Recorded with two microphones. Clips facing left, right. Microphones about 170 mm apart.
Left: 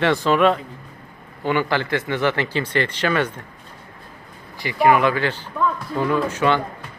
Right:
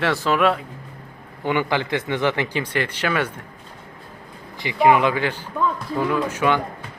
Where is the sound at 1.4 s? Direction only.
15° right (ahead or behind).